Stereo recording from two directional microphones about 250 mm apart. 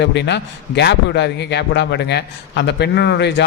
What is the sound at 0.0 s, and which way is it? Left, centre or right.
A man's voice, left.